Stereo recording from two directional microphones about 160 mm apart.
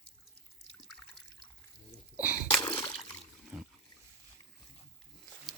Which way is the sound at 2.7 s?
30° left (ahead or behind).